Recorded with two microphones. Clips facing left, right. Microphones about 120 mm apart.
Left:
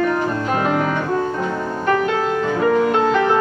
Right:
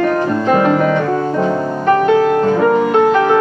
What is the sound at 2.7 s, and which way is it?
Music, 20° right (ahead or behind).